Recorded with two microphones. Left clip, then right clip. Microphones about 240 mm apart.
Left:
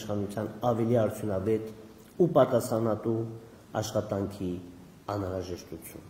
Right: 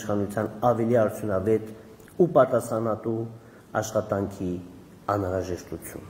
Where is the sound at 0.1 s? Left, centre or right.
Centre.